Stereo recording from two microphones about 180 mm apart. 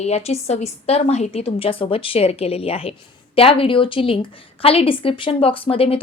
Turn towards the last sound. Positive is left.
turn(degrees=30)  # may be behind; listen again after turning